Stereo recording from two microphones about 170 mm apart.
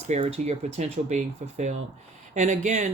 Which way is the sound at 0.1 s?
40° right (ahead or behind).